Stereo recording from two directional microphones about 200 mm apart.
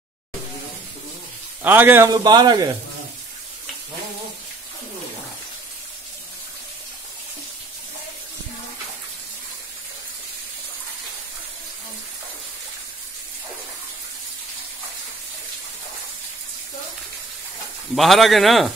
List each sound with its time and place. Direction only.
1.6 s a man's voice: 10° right (ahead or behind)
17.9 s speech: centre (ahead or behind)